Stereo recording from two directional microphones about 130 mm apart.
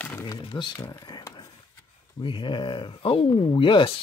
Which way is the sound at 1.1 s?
30° left (ahead or behind).